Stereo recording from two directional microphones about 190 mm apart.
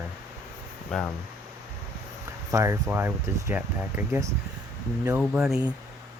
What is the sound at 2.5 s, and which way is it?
Speech, 15° right (ahead or behind).